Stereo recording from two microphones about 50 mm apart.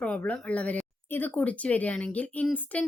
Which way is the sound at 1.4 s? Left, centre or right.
Left.